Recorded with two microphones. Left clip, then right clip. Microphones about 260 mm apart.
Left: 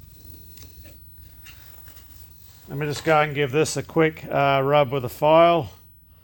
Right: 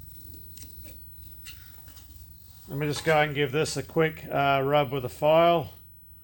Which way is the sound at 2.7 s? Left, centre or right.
Left.